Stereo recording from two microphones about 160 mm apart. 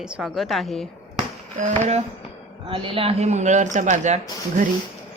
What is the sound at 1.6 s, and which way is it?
Speech, 45° right (ahead or behind).